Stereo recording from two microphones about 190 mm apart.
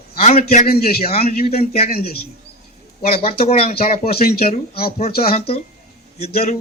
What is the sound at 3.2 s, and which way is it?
Speech, 30° left (ahead or behind).